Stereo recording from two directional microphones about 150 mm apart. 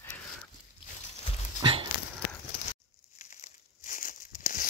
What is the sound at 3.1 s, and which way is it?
Crumpling, 55° left (ahead or behind).